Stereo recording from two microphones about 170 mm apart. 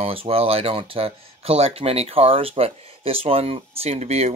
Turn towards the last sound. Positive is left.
turn(degrees=-40)  # may be behind; listen again after turning